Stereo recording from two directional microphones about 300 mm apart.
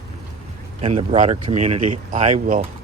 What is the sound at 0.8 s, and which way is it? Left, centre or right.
Speech, right.